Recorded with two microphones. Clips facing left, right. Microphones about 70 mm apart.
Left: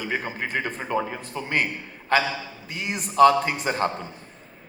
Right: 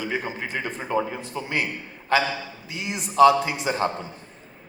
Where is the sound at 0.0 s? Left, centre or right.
Left.